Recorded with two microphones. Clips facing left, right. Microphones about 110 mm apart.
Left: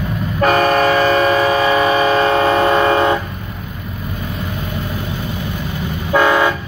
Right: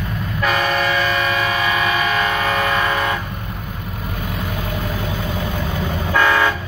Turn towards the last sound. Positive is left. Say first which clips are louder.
# left 3 dB
turn(degrees=20)  # may be behind; listen again after turning